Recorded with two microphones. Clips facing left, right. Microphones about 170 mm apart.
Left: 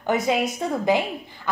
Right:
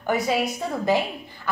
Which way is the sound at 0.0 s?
20° left (ahead or behind).